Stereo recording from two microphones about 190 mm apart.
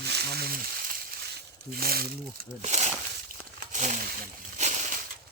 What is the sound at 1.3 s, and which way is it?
Speech, 55° right (ahead or behind).